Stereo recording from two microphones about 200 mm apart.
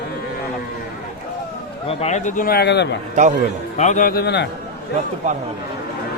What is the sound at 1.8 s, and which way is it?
A man's voice, 35° left (ahead or behind).